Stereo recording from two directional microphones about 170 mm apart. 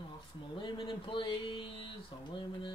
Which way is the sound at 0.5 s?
30° left (ahead or behind).